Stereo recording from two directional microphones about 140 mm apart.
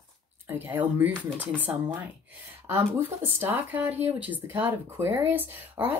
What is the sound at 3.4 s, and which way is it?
Speech, 15° right (ahead or behind).